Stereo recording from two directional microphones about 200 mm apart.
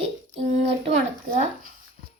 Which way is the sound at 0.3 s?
35° right (ahead or behind).